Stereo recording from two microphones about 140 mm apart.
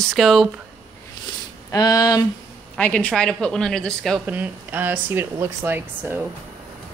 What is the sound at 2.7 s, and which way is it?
Speech, 10° left (ahead or behind).